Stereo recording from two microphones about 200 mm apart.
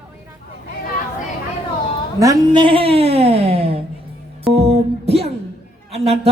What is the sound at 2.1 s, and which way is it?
Speech, 20° right (ahead or behind).